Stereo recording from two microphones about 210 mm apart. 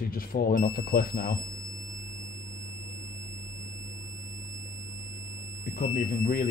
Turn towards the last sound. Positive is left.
turn(degrees=45)  # may be behind; listen again after turning